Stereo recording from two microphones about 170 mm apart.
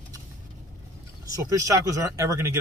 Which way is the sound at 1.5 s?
20° right (ahead or behind).